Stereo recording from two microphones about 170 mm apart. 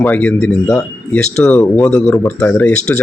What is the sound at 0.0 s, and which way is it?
Speech, 10° left (ahead or behind).